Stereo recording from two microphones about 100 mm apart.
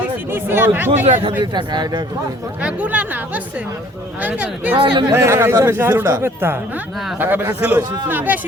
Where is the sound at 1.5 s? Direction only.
45° right (ahead or behind).